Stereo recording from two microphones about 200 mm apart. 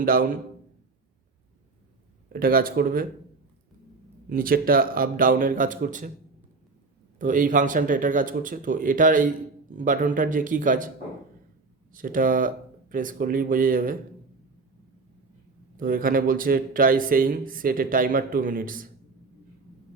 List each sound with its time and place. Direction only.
0.0 s speech: 45° right (ahead or behind)
2.3 s speech: 45° right (ahead or behind)
4.3 s speech: 45° right (ahead or behind)
7.2 s speech: 40° right (ahead or behind)
11.9 s speech: 40° right (ahead or behind)
15.8 s speech: 45° right (ahead or behind)